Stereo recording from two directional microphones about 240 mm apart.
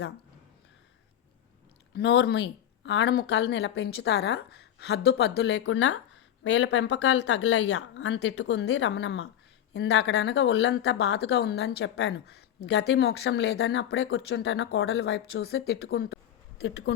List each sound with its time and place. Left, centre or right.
1.9 s speech: left